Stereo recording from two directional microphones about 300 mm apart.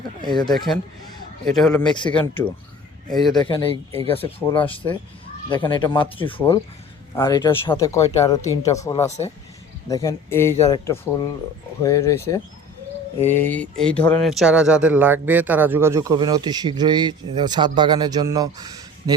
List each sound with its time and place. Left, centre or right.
0.2 s speech: centre
0.5 s speech: centre
1.9 s speech: centre
3.3 s speech: centre